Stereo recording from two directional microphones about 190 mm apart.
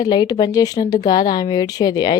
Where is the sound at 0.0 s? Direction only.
20° left (ahead or behind).